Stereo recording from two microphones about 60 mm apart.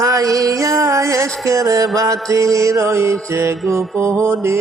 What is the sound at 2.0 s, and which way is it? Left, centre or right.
Mantra, right.